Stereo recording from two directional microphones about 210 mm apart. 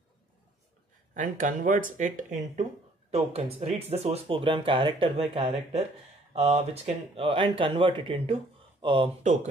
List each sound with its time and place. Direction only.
1.1 s speech: 40° right (ahead or behind)